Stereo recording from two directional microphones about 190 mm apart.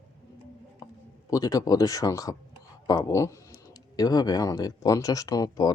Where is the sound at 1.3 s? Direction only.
20° left (ahead or behind).